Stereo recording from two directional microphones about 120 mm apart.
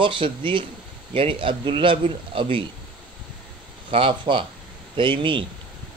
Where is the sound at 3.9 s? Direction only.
45° right (ahead or behind).